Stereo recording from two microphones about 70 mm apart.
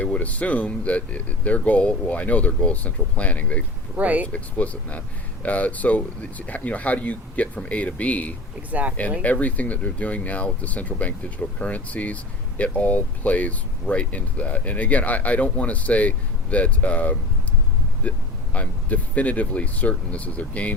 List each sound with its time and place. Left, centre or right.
0.0 s speech: left
3.9 s speech: right
4.3 s speech: centre
8.7 s speech: right
9.2 s speech: left